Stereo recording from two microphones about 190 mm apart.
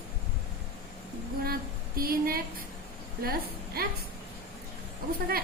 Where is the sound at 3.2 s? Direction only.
50° right (ahead or behind).